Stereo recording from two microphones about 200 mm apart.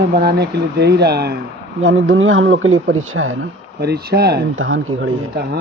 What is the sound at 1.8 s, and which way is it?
Speech, 75° right (ahead or behind).